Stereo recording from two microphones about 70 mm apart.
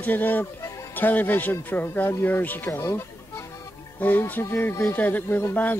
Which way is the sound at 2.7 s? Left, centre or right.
Left.